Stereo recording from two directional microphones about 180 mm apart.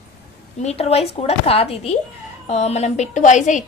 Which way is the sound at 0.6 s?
35° left (ahead or behind).